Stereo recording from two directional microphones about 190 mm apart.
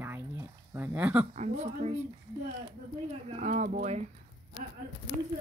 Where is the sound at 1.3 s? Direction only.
35° right (ahead or behind).